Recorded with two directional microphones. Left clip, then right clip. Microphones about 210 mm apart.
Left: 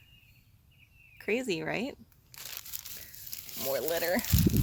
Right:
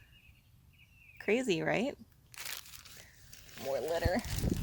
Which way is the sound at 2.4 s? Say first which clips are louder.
Right 1 dB; 15° right (ahead or behind).